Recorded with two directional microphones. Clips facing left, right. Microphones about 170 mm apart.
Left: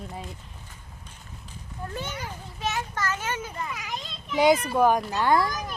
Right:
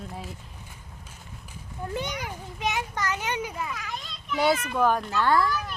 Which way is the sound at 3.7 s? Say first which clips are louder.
Left 1 dB; 10° left (ahead or behind).